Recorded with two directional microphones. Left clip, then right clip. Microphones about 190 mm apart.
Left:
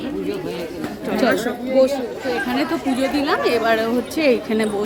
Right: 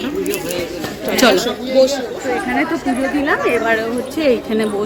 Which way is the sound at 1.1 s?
5° right (ahead or behind).